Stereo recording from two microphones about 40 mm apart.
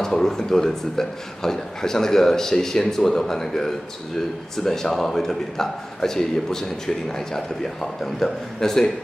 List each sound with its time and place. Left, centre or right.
0.0 s a man's voice: centre